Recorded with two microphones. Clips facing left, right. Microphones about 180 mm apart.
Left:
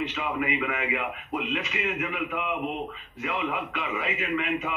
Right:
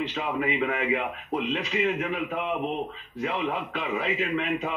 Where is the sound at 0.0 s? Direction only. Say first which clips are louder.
Right 1 dB; 35° right (ahead or behind).